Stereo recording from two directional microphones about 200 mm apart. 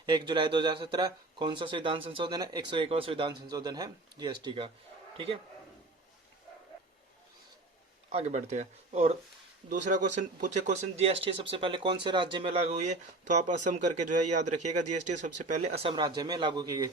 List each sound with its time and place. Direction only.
0.0 s speech: 20° right (ahead or behind)
8.1 s speech: 35° right (ahead or behind)